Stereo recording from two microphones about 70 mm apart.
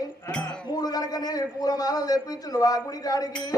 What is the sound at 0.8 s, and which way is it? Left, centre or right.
A man's voice, left.